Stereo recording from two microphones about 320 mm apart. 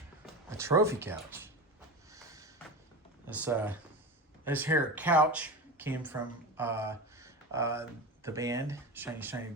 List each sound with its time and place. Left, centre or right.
0.5 s speech: centre
2.1 s a sound: centre
3.2 s speech: centre